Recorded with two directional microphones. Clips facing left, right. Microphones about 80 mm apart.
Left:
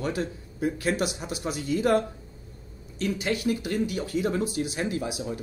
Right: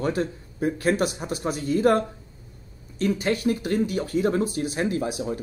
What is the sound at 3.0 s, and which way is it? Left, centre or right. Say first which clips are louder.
Speech: right 4 dB; right.